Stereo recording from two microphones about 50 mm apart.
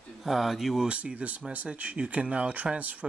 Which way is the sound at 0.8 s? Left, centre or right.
Right.